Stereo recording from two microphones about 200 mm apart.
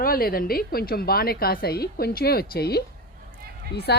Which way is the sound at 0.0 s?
45° left (ahead or behind).